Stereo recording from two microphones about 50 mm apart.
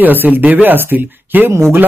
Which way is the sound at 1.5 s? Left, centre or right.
Right.